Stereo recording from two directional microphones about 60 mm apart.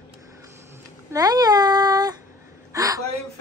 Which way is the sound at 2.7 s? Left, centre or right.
Right.